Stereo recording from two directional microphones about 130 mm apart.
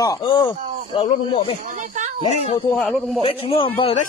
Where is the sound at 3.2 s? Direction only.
45° left (ahead or behind).